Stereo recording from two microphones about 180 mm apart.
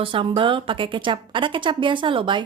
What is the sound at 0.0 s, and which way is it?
A woman's voice, 30° right (ahead or behind).